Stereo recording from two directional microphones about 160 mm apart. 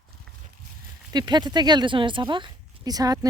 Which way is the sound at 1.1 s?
25° right (ahead or behind).